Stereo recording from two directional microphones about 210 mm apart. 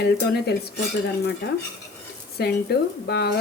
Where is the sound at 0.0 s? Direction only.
50° left (ahead or behind).